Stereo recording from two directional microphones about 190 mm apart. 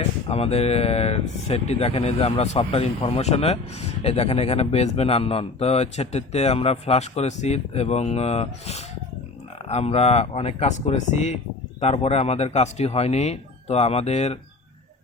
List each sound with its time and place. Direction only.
0.3 s speech: 30° left (ahead or behind)